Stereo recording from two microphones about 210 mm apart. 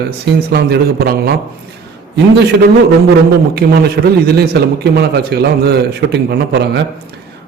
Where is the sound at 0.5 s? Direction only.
50° right (ahead or behind).